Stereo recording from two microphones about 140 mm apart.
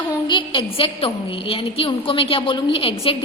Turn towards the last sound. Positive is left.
turn(degrees=40)  # may be behind; listen again after turning